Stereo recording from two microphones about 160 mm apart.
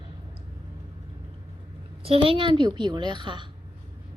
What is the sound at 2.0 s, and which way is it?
A woman's voice, 35° right (ahead or behind).